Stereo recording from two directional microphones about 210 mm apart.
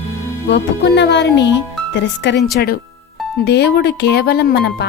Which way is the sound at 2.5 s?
45° left (ahead or behind).